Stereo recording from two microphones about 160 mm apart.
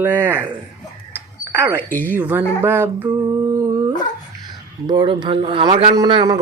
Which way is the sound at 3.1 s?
25° right (ahead or behind).